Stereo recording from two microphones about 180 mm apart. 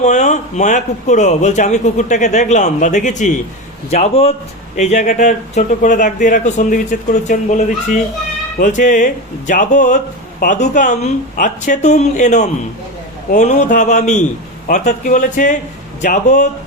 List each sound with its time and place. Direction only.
0.0 s a man's voice: 40° left (ahead or behind)